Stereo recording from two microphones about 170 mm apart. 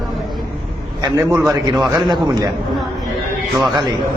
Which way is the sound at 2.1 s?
25° right (ahead or behind).